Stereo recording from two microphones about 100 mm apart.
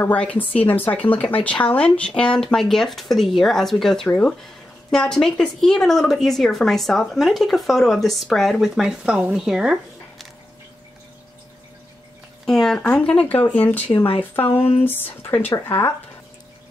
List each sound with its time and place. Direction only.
0.0 s speech: 15° left (ahead or behind); by 10.2 s 5° right (ahead or behind)
12.4 s speech: 5° left (ahead or behind); by 14.6 s 25° left (ahead or behind)
14.6 s speech: 85° left
14.9 s speech: 20° left (ahead or behind)